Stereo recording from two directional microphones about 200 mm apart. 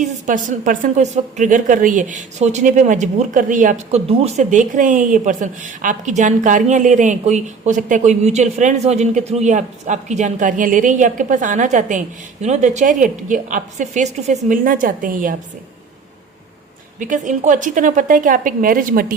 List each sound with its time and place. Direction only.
0.0 s a woman's voice: 40° right (ahead or behind)
17.0 s a woman's voice: 40° right (ahead or behind)